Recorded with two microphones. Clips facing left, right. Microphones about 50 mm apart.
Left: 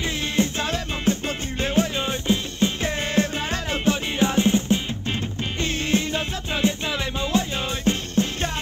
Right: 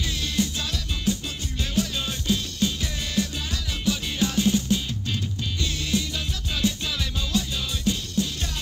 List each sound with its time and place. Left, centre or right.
0.0 s music: left